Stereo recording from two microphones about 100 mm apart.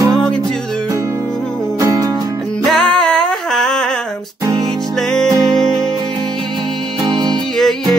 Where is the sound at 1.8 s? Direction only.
35° right (ahead or behind).